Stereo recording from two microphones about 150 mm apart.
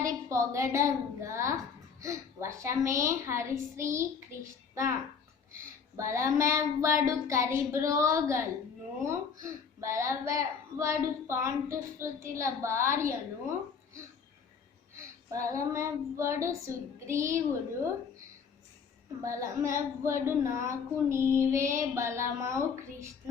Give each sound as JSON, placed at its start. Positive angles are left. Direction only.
{"t": 0.3, "sound": "a woman's voice", "side_deg": -20}
{"t": 6.0, "sound": "a woman's voice", "side_deg": -20}
{"t": 15.3, "sound": "a woman's voice", "side_deg": -20}
{"t": 19.2, "sound": "a woman's voice", "side_deg": -20}